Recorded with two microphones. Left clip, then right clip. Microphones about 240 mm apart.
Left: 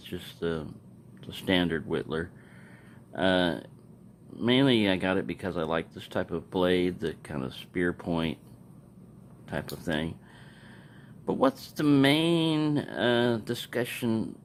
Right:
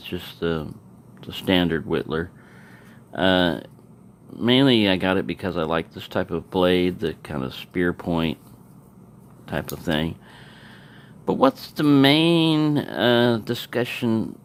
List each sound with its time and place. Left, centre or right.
0.0 s speech: centre
9.5 s speech: centre
11.3 s speech: centre